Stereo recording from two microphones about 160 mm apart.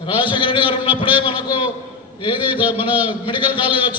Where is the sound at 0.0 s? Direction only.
30° left (ahead or behind).